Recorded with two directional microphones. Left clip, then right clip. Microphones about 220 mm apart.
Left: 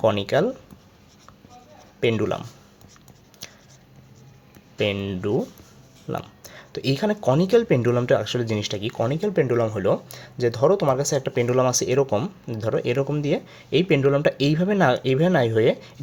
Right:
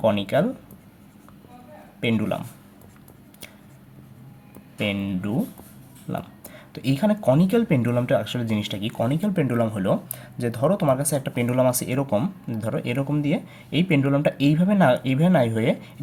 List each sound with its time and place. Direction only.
0.0 s speech: 35° left (ahead or behind)
2.0 s speech: 35° left (ahead or behind)
4.8 s speech: 35° left (ahead or behind)